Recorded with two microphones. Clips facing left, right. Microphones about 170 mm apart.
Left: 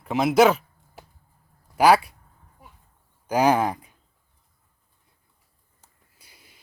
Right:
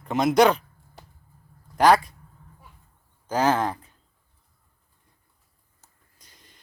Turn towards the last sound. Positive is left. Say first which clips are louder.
# even
turn(degrees=10)  # may be behind; listen again after turning